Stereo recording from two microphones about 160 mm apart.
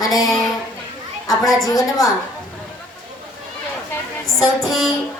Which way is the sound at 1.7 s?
25° left (ahead or behind).